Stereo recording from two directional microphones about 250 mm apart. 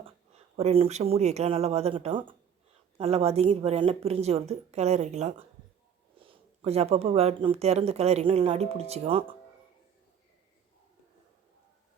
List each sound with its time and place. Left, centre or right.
0.5 s speech: right